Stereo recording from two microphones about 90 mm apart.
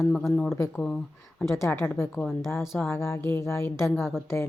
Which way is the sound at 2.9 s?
30° left (ahead or behind).